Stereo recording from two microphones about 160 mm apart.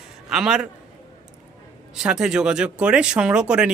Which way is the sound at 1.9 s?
5° right (ahead or behind).